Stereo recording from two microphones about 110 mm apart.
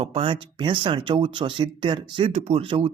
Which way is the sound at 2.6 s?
55° right (ahead or behind).